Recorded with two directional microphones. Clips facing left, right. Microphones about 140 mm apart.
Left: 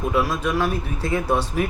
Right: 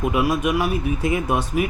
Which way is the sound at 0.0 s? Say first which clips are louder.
Right 2 dB; 15° right (ahead or behind).